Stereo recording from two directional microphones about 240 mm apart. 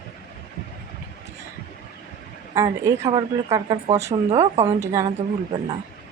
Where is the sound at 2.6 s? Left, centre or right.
Centre.